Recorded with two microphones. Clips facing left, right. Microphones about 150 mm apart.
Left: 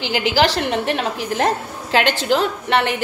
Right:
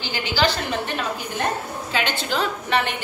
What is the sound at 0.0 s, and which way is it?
A woman's voice, 90° left.